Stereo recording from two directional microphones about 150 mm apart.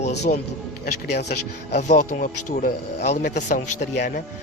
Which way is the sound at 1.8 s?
55° left (ahead or behind).